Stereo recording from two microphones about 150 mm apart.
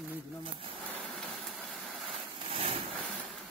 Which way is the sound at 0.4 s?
35° right (ahead or behind).